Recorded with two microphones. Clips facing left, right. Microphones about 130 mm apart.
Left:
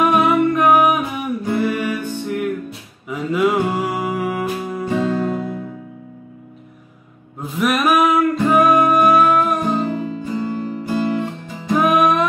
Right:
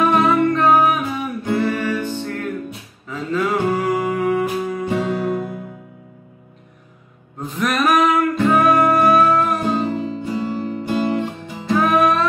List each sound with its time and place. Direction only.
0.0 s music: 15° left (ahead or behind); by 5.6 s 5° right (ahead or behind)
7.3 s music: 5° left (ahead or behind)
9.8 s music: 25° right (ahead or behind)
11.7 s music: 15° left (ahead or behind)